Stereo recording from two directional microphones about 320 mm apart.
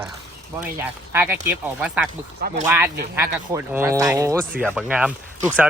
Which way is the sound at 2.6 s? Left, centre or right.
Centre.